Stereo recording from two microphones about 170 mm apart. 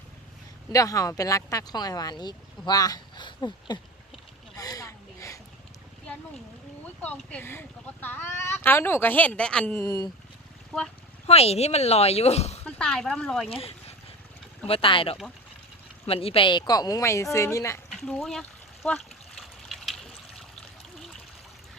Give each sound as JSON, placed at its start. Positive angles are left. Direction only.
{"t": 0.7, "sound": "speech", "side_deg": 20}
{"t": 4.5, "sound": "a sound", "side_deg": 20}
{"t": 6.8, "sound": "speech", "side_deg": 10}
{"t": 9.8, "sound": "speech", "side_deg": 20}
{"t": 10.7, "sound": "speech", "side_deg": 5}
{"t": 11.3, "sound": "speech", "side_deg": 35}
{"t": 12.6, "sound": "speech", "side_deg": 5}
{"t": 13.5, "sound": "speech", "side_deg": 35}
{"t": 17.8, "sound": "speech", "side_deg": 5}
{"t": 19.4, "sound": "water", "side_deg": 0}